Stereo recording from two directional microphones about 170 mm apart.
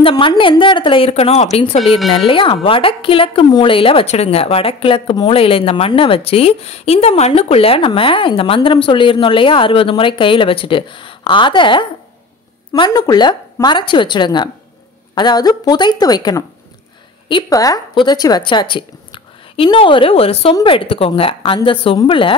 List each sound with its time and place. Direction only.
0.0 s a woman's voice: 25° left (ahead or behind)